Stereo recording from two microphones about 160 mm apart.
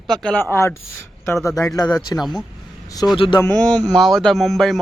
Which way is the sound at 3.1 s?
30° left (ahead or behind).